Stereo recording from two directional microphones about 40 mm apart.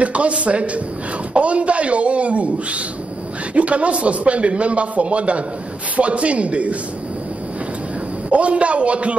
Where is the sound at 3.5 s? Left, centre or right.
Right.